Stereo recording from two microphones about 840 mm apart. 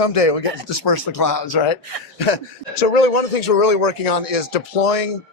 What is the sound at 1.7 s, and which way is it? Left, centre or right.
A man's voice, left.